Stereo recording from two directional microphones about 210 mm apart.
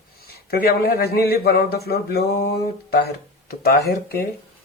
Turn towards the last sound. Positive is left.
turn(degrees=45)  # may be behind; listen again after turning